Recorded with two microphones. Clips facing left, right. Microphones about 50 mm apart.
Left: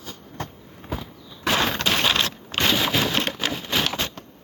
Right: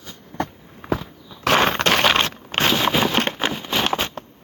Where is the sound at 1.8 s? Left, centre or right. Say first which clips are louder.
Right 5 dB; right.